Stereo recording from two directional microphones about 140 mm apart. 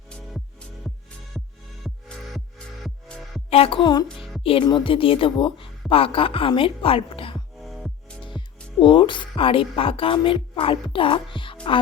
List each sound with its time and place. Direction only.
1.8 s music: centre (ahead or behind)
3.5 s a woman's voice: 40° left (ahead or behind)
7.6 s music: centre (ahead or behind)
8.4 s speech: 35° left (ahead or behind)